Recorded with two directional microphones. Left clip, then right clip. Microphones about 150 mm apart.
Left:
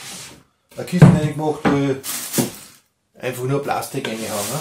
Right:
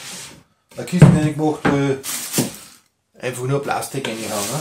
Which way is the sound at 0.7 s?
15° right (ahead or behind).